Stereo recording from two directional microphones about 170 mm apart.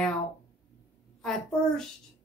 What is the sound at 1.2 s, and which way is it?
Speech, 5° left (ahead or behind).